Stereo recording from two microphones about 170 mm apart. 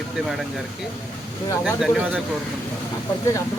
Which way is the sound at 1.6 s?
5° right (ahead or behind).